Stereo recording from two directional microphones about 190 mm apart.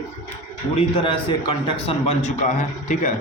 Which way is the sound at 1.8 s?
30° left (ahead or behind).